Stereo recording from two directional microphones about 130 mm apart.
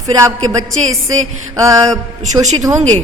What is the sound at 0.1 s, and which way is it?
A man's voice, 25° right (ahead or behind).